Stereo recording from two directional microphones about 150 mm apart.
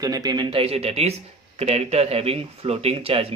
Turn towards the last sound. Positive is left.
turn(degrees=-40)  # may be behind; listen again after turning